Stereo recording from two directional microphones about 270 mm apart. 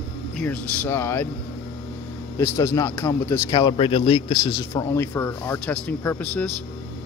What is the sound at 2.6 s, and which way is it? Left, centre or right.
Speech, centre.